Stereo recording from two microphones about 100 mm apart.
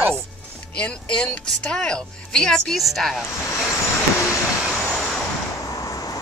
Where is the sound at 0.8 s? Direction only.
10° left (ahead or behind).